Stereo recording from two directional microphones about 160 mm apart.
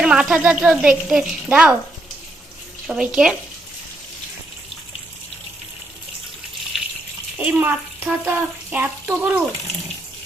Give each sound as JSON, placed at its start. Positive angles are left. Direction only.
{"t": 0.0, "sound": "speech", "side_deg": -5}
{"t": 2.8, "sound": "speech", "side_deg": -5}
{"t": 7.3, "sound": "speech", "side_deg": -10}